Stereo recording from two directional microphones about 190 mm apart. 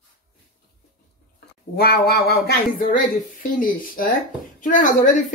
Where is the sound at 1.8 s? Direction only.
55° left (ahead or behind).